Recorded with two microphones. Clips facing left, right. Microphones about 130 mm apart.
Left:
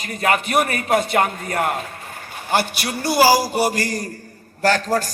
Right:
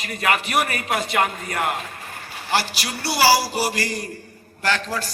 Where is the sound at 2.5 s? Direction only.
55° left (ahead or behind).